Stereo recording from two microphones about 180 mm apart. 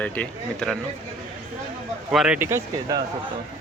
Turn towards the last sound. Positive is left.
turn(degrees=-20)  # may be behind; listen again after turning